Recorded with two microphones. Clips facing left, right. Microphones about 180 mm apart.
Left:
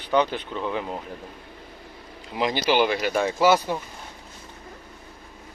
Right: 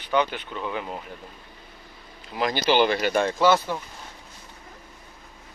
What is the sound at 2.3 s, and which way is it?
Speech, 15° left (ahead or behind).